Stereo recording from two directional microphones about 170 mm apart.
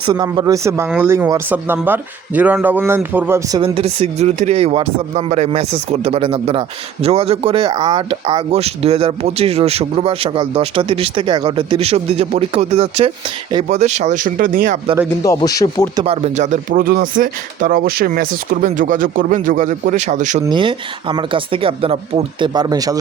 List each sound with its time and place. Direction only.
0.0 s a man's voice: 25° right (ahead or behind)
3.6 s speech: 35° right (ahead or behind); by 14.8 s 55° right (ahead or behind)
15.2 s a man's voice: 20° left (ahead or behind)
16.0 s speech: 40° right (ahead or behind)
20.4 s speech: 25° right (ahead or behind)